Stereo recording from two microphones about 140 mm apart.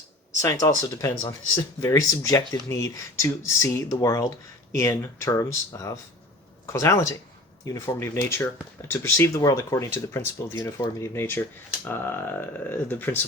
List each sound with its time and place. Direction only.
0.4 s speech: 25° left (ahead or behind)